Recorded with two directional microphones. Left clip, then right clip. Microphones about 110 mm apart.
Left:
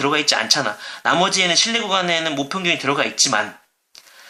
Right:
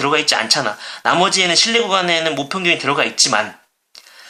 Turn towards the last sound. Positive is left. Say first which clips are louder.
# right 3 dB
turn(degrees=-20)  # may be behind; listen again after turning